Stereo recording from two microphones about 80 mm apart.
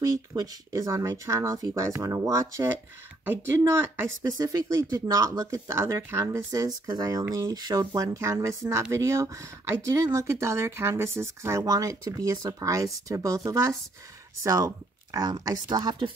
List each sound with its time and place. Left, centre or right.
0.4 s speech: right
6.9 s speech: right
7.9 s speech: right
11.6 s speech: right